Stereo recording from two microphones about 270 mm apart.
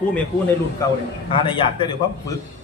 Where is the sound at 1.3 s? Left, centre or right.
Centre.